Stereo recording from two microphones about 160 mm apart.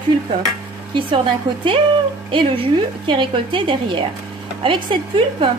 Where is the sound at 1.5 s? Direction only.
30° right (ahead or behind).